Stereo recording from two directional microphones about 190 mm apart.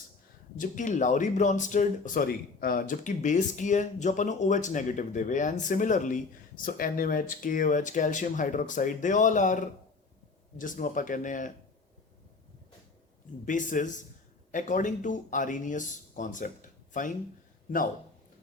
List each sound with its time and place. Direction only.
0.5 s speech: 45° left (ahead or behind)
13.4 s speech: 45° left (ahead or behind)